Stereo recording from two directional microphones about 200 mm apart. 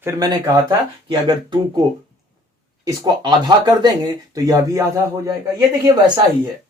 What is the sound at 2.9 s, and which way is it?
Speech, 20° right (ahead or behind).